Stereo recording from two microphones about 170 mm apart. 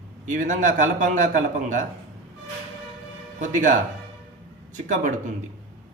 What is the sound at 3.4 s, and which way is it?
A man's voice, 50° right (ahead or behind).